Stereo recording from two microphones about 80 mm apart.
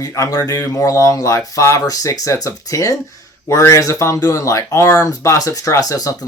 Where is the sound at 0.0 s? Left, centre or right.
Left.